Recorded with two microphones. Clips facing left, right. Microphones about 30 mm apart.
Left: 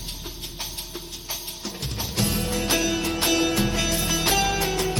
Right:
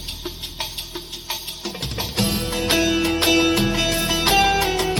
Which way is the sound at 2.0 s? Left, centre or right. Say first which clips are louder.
Right 3 dB; right.